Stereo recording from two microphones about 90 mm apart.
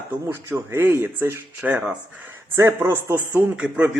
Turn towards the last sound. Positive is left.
turn(degrees=-10)  # may be behind; listen again after turning